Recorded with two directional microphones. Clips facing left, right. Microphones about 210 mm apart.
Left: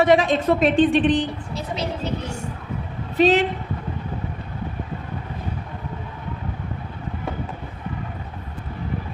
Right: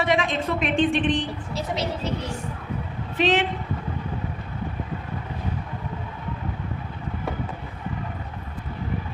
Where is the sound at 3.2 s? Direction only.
40° left (ahead or behind).